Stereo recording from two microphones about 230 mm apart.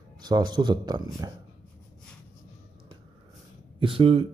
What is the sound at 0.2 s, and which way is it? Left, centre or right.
Speech, centre.